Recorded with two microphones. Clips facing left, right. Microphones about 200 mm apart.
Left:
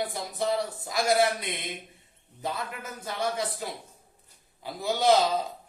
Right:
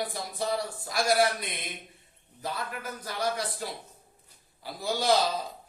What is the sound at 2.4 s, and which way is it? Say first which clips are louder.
Speech: left 1 dB; 25° left (ahead or behind).